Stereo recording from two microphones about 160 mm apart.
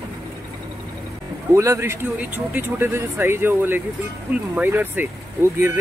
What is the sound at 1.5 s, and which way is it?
Speech, 20° right (ahead or behind).